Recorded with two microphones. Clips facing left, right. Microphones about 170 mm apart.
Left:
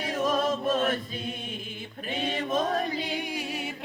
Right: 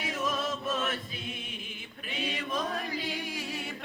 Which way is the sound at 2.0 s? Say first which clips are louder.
Left 5 dB; 50° left (ahead or behind).